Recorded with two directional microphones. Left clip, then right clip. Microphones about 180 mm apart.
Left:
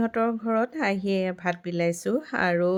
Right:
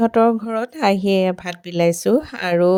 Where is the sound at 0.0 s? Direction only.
35° right (ahead or behind).